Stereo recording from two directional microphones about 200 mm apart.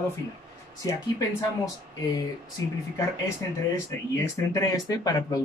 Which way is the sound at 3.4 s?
15° left (ahead or behind).